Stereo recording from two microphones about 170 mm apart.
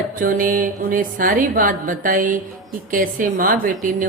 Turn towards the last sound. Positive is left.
turn(degrees=-55)  # may be behind; listen again after turning